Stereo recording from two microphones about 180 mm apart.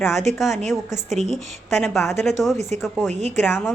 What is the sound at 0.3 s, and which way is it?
A woman's voice, centre (ahead or behind).